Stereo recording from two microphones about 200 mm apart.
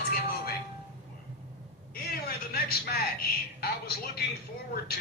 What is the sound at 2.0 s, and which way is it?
Speech, 50° left (ahead or behind).